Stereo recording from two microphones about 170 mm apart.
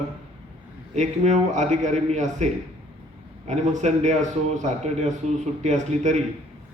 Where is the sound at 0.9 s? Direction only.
45° right (ahead or behind).